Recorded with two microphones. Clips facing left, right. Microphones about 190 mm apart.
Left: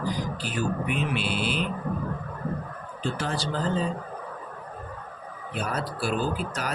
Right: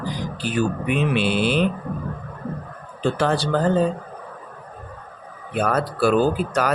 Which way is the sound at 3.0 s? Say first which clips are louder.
Right 9 dB; 65° right (ahead or behind).